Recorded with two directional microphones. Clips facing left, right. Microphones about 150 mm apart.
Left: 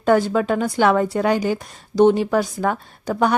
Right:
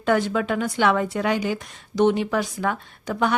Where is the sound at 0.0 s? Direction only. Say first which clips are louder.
Left 4 dB; 40° left (ahead or behind).